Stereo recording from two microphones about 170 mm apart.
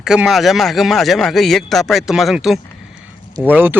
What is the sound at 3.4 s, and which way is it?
Speech, 10° right (ahead or behind).